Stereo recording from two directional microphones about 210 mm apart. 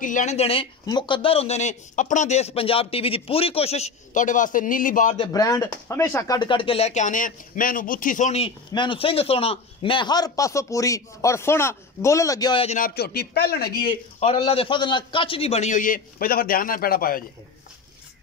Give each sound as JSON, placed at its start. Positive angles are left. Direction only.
{"t": 0.0, "sound": "speech", "side_deg": 35}
{"t": 5.2, "sound": "speech", "side_deg": 15}
{"t": 12.7, "sound": "a man's voice", "side_deg": 45}
{"t": 13.8, "sound": "speech", "side_deg": 25}